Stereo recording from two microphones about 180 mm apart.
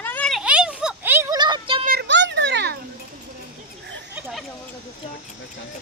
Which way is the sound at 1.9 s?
70° right (ahead or behind).